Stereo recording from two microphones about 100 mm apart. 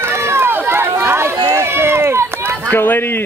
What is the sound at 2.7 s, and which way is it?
Speech, 20° left (ahead or behind).